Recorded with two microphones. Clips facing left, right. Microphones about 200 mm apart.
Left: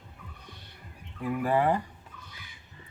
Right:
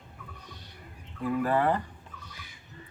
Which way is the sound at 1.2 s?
10° left (ahead or behind).